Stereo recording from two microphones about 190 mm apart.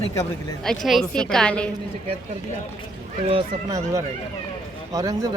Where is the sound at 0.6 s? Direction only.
Centre (ahead or behind).